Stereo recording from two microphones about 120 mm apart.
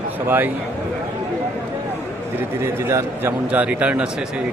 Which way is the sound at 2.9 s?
25° right (ahead or behind).